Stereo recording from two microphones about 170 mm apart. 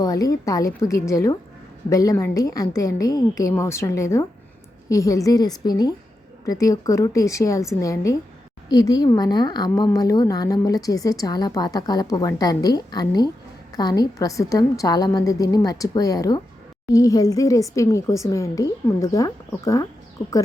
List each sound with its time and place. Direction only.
0.0 s a woman's voice: 20° left (ahead or behind)